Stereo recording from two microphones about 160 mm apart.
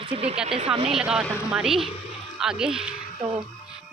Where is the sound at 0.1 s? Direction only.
40° right (ahead or behind).